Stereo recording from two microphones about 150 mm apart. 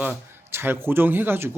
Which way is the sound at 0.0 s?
10° right (ahead or behind).